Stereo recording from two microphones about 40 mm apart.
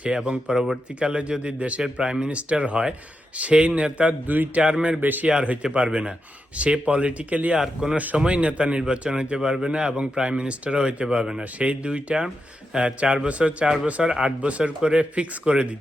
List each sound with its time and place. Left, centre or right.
0.0 s speech: right
1.8 s speech: right
4.9 s a man's voice: right
5.3 s speech: right
8.2 s speech: right
11.6 s speech: right
14.0 s speech: centre